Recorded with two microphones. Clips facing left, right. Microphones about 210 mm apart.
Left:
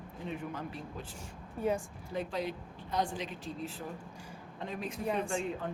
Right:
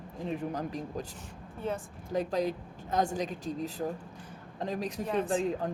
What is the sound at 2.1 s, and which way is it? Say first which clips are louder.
Speech: right 6 dB; 40° right (ahead or behind).